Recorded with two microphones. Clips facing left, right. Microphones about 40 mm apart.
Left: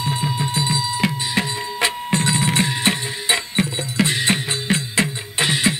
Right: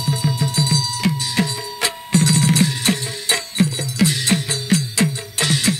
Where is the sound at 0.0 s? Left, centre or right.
Left.